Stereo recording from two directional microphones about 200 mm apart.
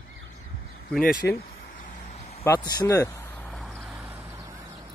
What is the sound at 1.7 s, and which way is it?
Vehicle, 40° left (ahead or behind).